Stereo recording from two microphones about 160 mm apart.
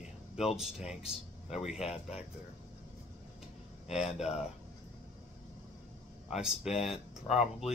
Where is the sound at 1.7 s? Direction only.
40° left (ahead or behind).